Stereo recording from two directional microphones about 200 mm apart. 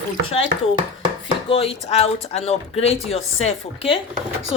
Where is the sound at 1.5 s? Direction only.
30° left (ahead or behind).